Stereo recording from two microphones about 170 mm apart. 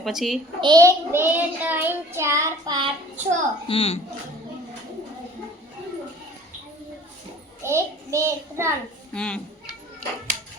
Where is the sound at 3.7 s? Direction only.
35° left (ahead or behind).